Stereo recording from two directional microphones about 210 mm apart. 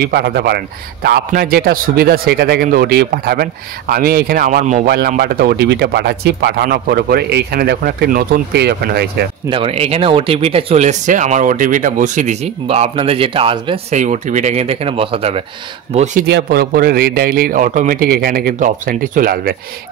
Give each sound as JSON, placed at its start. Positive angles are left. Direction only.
{"t": 0.0, "sound": "speech", "side_deg": -50}
{"t": 9.5, "sound": "speech", "side_deg": -25}
{"t": 16.3, "sound": "speech", "side_deg": -50}